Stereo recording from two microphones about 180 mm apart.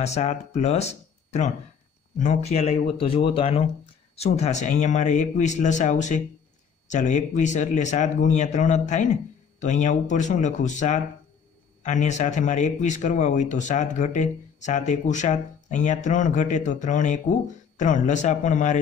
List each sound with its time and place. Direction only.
0.0 s speech: 40° left (ahead or behind)